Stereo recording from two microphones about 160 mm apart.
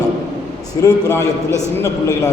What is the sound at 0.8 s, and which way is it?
Speech, 20° left (ahead or behind).